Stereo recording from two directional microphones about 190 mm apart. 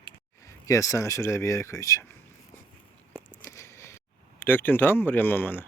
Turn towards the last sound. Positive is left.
turn(degrees=10)  # may be behind; listen again after turning